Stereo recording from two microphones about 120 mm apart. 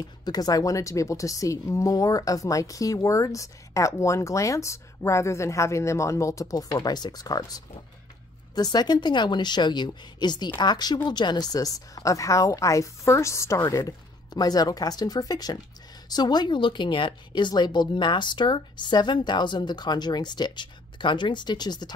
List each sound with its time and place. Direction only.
0.2 s a woman's voice: 35° left (ahead or behind)